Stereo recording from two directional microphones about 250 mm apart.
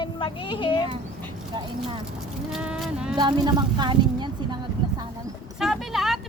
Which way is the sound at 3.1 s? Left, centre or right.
Centre.